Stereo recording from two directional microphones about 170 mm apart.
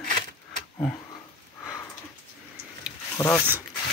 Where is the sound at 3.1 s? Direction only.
15° left (ahead or behind).